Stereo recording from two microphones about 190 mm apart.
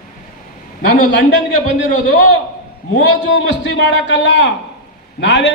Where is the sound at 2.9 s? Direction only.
70° left (ahead or behind).